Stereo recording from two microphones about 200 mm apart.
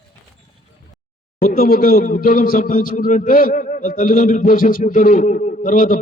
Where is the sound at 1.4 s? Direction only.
45° left (ahead or behind).